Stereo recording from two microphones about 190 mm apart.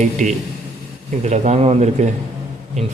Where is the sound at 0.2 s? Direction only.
40° right (ahead or behind).